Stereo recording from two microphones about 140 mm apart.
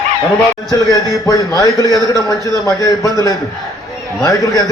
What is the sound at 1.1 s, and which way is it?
A man's voice, 25° left (ahead or behind).